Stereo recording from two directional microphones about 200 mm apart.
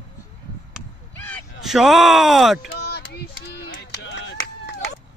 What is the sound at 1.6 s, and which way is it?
Speech, centre (ahead or behind).